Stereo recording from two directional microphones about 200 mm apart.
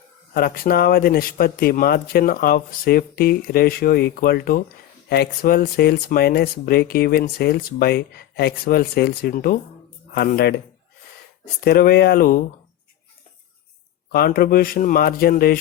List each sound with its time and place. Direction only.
0.3 s speech: 50° left (ahead or behind)
11.6 s speech: 50° left (ahead or behind)
14.1 s speech: 45° left (ahead or behind)